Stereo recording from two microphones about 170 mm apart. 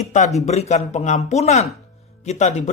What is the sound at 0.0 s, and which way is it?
A man's voice, 45° left (ahead or behind).